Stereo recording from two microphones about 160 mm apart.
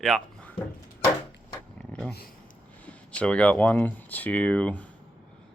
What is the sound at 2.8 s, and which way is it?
Speech, 5° left (ahead or behind).